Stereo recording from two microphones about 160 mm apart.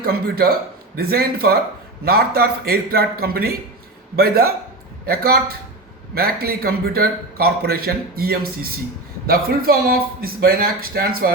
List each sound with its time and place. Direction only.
0.0 s a man's voice: 70° right (ahead or behind)